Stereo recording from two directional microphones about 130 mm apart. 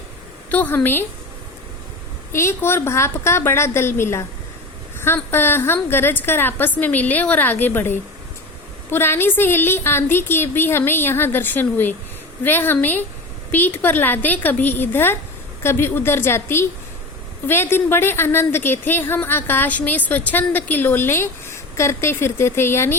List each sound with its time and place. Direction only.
0.5 s a woman's voice: 15° left (ahead or behind)
2.3 s a woman's voice: 20° left (ahead or behind)